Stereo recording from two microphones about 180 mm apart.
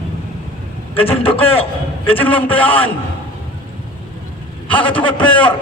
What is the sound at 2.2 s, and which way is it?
Speech, 10° left (ahead or behind).